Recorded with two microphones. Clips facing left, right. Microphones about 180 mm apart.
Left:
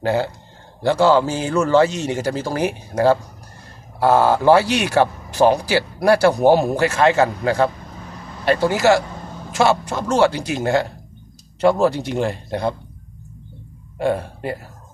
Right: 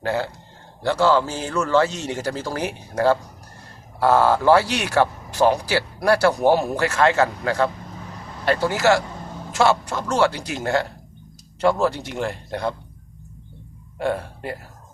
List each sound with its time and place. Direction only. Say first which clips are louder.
0.0 s a man's voice: left 4 dB; 25° left (ahead or behind)
4.0 s a man's voice: left 2 dB; 20° left (ahead or behind)
14.0 s speech: left 4 dB; 20° left (ahead or behind)